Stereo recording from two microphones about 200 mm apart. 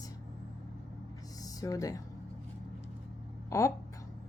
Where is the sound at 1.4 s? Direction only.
15° left (ahead or behind).